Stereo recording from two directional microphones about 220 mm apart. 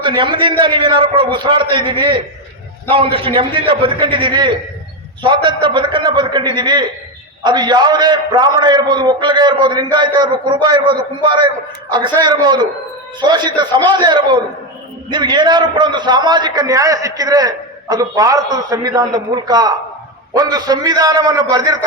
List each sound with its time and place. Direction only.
0.0 s a man's voice: 20° right (ahead or behind)